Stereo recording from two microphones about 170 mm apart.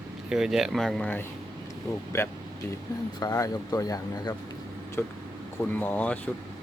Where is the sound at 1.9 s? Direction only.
15° left (ahead or behind).